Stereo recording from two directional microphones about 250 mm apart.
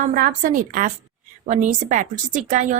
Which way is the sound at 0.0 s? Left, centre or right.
Right.